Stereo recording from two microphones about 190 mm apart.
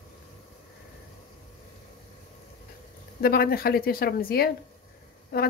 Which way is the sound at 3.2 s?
50° left (ahead or behind).